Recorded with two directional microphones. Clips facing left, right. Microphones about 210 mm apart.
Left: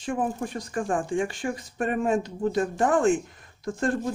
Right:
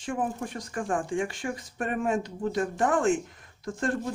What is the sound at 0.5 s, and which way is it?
Speech, 35° left (ahead or behind).